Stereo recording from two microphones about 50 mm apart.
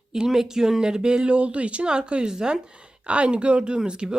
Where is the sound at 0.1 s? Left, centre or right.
Centre.